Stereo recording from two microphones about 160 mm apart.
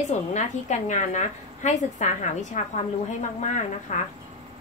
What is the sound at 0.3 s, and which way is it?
A woman's voice, 45° left (ahead or behind).